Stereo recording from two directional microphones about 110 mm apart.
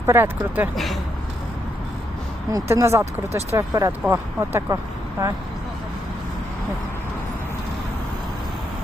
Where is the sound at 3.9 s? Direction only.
20° right (ahead or behind).